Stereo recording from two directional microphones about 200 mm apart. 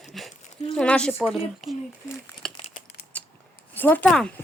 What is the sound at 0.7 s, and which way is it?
Speech, 5° left (ahead or behind).